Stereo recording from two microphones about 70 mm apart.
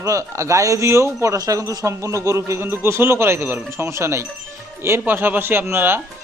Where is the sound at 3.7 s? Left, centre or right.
Right.